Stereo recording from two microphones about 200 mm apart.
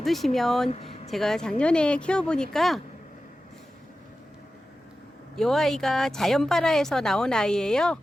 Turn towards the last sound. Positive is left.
turn(degrees=5)  # may be behind; listen again after turning